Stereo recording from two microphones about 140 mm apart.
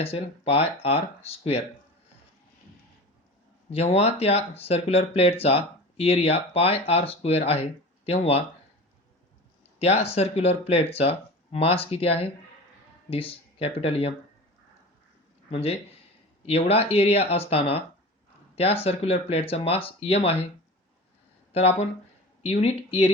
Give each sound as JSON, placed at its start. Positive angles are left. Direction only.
{"t": 0.0, "sound": "speech", "side_deg": 45}
{"t": 3.7, "sound": "speech", "side_deg": 45}
{"t": 9.7, "sound": "speech", "side_deg": 45}
{"t": 16.5, "sound": "speech", "side_deg": 45}
{"t": 21.5, "sound": "speech", "side_deg": 45}